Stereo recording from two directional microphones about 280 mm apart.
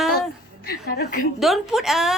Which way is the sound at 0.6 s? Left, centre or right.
Left.